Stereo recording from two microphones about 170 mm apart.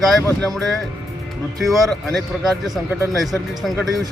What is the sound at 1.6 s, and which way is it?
Speech, centre (ahead or behind).